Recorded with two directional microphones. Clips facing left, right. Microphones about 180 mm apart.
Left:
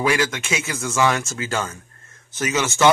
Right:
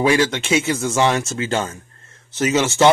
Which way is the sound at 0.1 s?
25° right (ahead or behind).